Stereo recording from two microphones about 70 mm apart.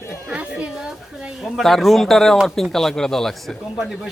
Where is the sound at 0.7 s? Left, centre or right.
Centre.